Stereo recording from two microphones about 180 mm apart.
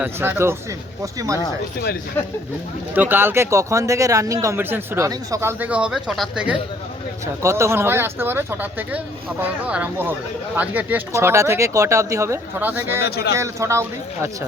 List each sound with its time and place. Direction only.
0.0 s speech: 10° right (ahead or behind)
2.9 s speech: 10° right (ahead or behind)
13.1 s speech: 60° left (ahead or behind)
13.3 s speech: 15° right (ahead or behind)